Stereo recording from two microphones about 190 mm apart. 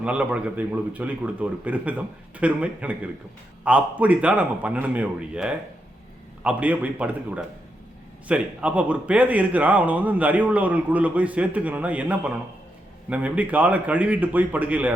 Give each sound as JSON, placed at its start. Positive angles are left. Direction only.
{"t": 0.0, "sound": "speech", "side_deg": -5}